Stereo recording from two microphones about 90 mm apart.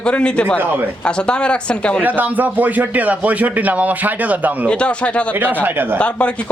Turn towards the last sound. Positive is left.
turn(degrees=15)  # may be behind; listen again after turning